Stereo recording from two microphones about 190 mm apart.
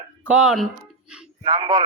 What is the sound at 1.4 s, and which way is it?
Speech, 25° right (ahead or behind).